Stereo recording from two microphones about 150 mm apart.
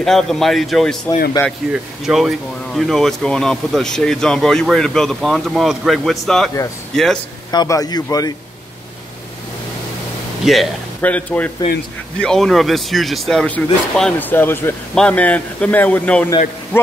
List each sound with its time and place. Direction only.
0.0 s speech: centre (ahead or behind)
1.4 s speech: 20° left (ahead or behind)
2.0 s speech: centre (ahead or behind)
7.5 s speech: 25° left (ahead or behind)
10.4 s speech: centre (ahead or behind)
11.0 s speech: 10° left (ahead or behind)